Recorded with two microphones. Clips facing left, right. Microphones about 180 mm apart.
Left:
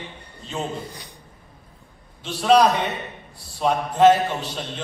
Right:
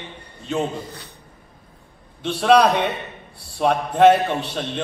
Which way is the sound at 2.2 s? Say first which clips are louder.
Right 1 dB; 60° right (ahead or behind).